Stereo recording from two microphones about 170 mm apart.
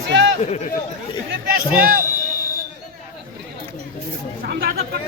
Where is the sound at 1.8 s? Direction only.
55° right (ahead or behind).